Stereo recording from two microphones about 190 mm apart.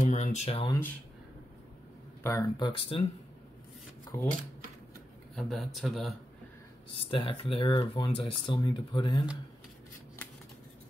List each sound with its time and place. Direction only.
0.0 s a sound: 40° left (ahead or behind)
0.7 s speech: 10° left (ahead or behind)
2.2 s speech: 15° left (ahead or behind)
2.7 s speech: 30° left (ahead or behind)
4.1 s speech: 15° left (ahead or behind)
5.3 s speech: centre (ahead or behind)
7.0 s speech: 25° left (ahead or behind)